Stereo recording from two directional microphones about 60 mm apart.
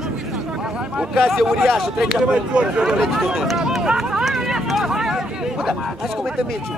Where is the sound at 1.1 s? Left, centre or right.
Centre.